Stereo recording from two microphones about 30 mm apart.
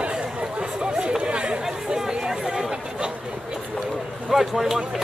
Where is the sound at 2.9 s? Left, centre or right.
Right.